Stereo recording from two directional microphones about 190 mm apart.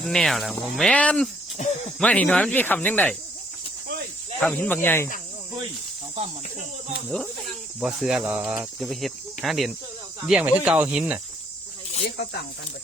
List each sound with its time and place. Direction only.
0.0 s cricket: centre (ahead or behind)
1.6 s speech: 40° left (ahead or behind)
2.0 s speech: 5° left (ahead or behind)
4.4 s speech: 5° left (ahead or behind)
7.8 s cricket: 5° right (ahead or behind)
10.2 s speech: 5° right (ahead or behind)
12.1 s speech: 55° left (ahead or behind)